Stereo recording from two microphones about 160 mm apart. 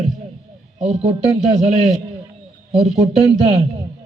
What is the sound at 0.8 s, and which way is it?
Speech, 40° right (ahead or behind).